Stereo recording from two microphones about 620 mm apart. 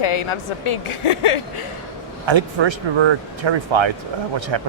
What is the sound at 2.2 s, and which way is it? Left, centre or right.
Speech, right.